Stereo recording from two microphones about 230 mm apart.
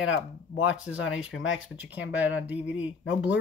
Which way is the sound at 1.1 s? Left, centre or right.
Left.